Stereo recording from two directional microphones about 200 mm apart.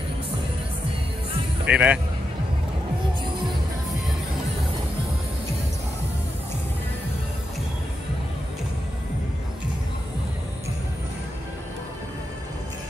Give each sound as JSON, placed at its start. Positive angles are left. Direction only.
{"t": 1.7, "sound": "speech", "side_deg": -5}